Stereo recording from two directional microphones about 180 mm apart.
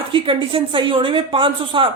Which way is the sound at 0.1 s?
30° right (ahead or behind).